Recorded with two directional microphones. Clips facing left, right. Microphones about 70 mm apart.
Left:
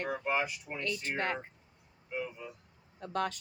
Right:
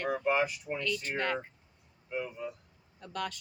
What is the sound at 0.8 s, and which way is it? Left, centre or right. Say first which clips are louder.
Speech: even; left.